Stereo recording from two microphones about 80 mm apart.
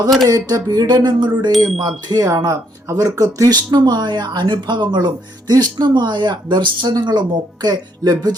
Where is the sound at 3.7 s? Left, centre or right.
Right.